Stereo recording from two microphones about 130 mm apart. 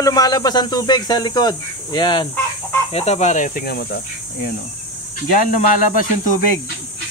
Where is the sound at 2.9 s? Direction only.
55° left (ahead or behind).